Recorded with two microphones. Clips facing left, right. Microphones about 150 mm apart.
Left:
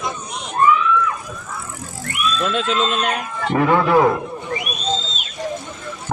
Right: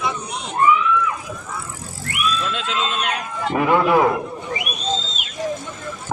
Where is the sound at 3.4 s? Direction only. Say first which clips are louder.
Left 1 dB; 10° right (ahead or behind).